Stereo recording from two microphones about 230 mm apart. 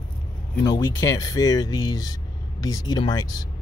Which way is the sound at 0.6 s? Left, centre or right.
Centre.